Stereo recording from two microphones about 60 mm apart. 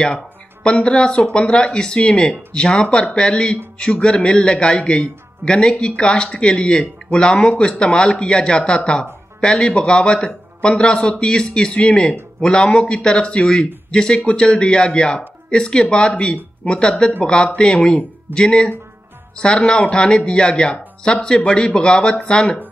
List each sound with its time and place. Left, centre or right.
0.7 s speech: centre